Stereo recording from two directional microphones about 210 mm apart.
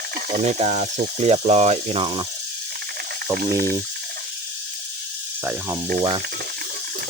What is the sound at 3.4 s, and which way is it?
Speech, 50° right (ahead or behind).